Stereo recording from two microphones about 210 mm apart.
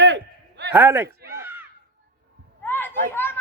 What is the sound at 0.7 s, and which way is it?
Speech, 10° right (ahead or behind).